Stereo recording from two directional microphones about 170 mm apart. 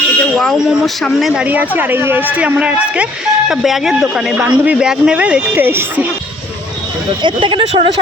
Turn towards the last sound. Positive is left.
turn(degrees=-30)  # may be behind; listen again after turning